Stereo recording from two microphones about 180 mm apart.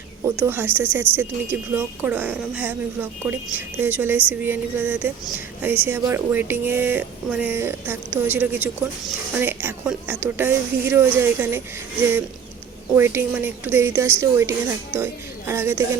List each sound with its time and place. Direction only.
0.3 s speech: 10° right (ahead or behind)
13.0 s speech: 10° right (ahead or behind)